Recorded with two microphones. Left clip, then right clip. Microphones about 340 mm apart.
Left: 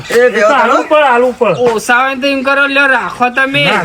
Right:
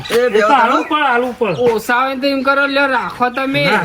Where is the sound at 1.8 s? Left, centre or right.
Left.